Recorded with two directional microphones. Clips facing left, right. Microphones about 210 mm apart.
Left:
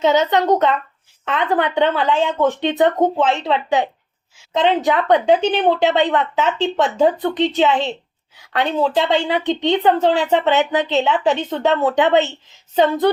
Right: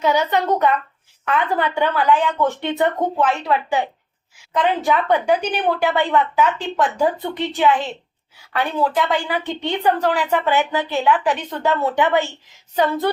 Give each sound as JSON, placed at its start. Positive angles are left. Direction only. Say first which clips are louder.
{"t": 0.0, "sound": "a woman's voice", "louder": "left 3 dB", "side_deg": 20}